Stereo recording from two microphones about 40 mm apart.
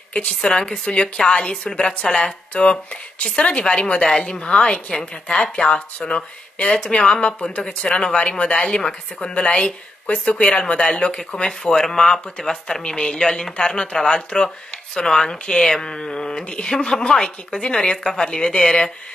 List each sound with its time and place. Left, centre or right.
0.3 s speech: centre